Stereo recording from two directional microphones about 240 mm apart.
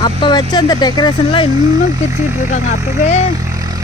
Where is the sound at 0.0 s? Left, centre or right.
Centre.